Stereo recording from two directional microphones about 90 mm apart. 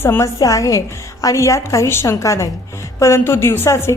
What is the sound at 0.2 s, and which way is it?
A woman's voice, 40° left (ahead or behind).